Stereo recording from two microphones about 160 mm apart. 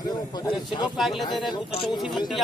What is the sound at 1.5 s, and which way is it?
Speech, 35° left (ahead or behind).